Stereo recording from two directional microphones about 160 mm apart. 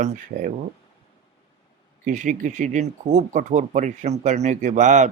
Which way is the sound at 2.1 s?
55° right (ahead or behind).